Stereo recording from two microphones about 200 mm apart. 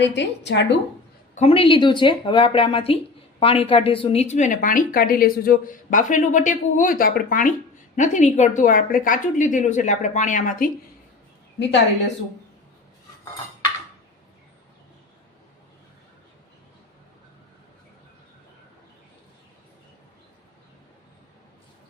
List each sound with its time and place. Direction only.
0.0 s a woman's voice: 60° left (ahead or behind)
1.4 s a woman's voice: 30° left (ahead or behind)